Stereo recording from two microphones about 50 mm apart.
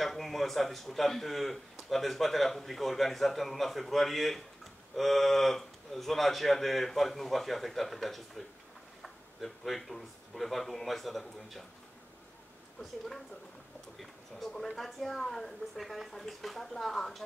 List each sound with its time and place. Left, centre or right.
0.0 s a man's voice: centre
13.9 s a man's voice: centre